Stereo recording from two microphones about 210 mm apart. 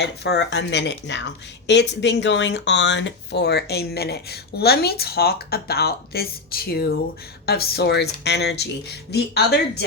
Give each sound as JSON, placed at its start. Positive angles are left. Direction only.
{"t": 0.0, "sound": "speech", "side_deg": 55}